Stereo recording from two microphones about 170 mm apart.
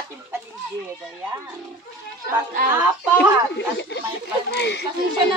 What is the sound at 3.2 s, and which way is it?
Speech, 90° left.